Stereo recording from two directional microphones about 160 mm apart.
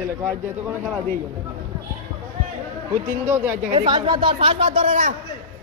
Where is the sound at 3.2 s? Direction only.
15° right (ahead or behind).